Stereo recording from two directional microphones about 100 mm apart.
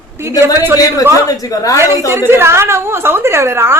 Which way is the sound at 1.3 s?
35° left (ahead or behind).